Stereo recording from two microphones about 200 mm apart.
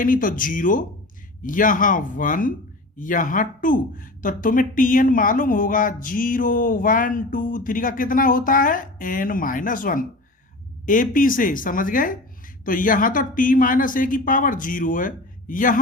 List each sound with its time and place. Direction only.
0.0 s speech: 45° left (ahead or behind)